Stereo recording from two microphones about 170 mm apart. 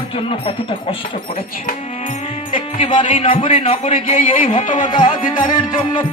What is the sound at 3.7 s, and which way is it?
Speech, 45° left (ahead or behind).